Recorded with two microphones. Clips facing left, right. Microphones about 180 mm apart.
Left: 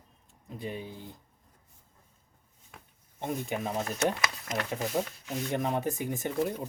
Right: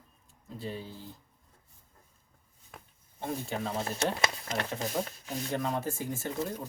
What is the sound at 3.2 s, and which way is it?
Speech, 15° left (ahead or behind).